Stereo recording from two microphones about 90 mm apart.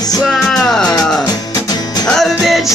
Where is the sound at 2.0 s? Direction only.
5° left (ahead or behind).